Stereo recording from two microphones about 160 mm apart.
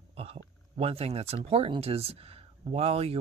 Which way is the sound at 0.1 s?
40° right (ahead or behind).